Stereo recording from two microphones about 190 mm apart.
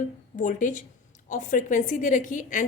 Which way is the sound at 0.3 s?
40° left (ahead or behind).